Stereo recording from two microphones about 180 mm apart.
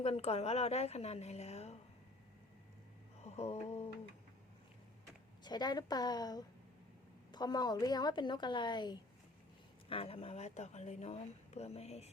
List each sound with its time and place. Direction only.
0.0 s speech: 35° left (ahead or behind)
3.2 s mantra: 35° left (ahead or behind)
5.4 s a woman's voice: 25° left (ahead or behind)